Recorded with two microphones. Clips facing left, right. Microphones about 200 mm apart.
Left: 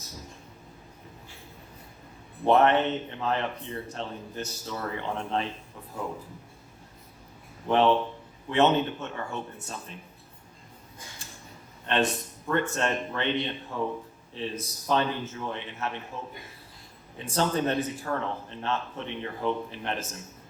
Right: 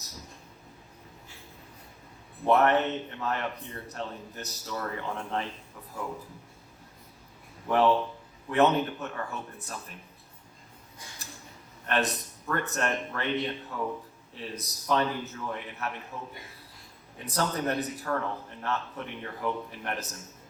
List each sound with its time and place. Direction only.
2.4 s speech: 30° left (ahead or behind)
7.7 s speech: 25° left (ahead or behind)
11.2 s a sound: 25° left (ahead or behind)
11.9 s speech: 25° left (ahead or behind)
17.2 s speech: 30° left (ahead or behind)